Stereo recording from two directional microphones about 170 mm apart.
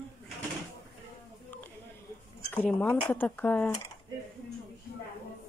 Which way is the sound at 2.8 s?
10° left (ahead or behind).